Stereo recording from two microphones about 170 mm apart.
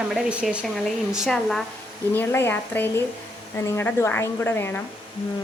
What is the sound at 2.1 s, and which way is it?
Speech, 15° left (ahead or behind).